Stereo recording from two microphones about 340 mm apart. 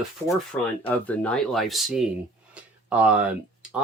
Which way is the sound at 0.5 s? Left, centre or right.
Centre.